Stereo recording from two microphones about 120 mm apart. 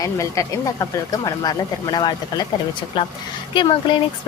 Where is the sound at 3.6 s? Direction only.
45° left (ahead or behind).